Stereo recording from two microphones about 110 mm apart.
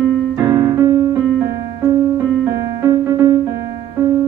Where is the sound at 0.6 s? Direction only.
30° right (ahead or behind).